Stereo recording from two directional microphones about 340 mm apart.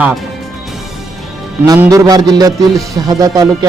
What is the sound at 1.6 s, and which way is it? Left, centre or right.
A man's voice, centre.